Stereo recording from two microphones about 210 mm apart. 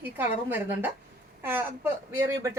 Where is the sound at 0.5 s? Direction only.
10° right (ahead or behind).